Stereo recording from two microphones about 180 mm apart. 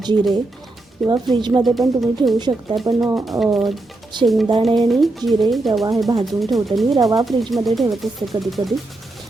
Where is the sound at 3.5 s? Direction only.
Centre (ahead or behind).